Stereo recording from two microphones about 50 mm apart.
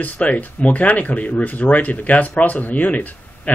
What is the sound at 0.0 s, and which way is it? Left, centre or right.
Speech, left.